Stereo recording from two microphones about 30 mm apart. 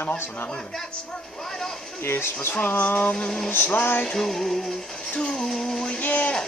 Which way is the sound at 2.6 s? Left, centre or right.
Left.